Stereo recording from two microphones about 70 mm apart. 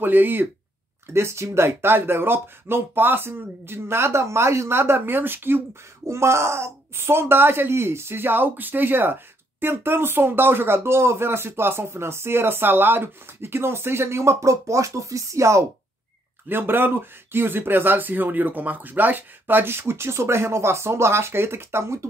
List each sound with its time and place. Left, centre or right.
0.0 s speech: right
1.1 s speech: right
6.0 s speech: right
16.4 s speech: right